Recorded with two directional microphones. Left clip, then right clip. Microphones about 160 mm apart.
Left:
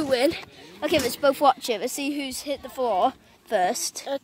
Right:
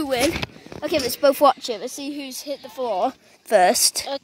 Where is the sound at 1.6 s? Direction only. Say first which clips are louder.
Left 1 dB; 15° right (ahead or behind).